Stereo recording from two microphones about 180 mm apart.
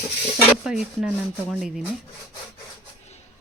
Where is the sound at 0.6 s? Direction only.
5° right (ahead or behind).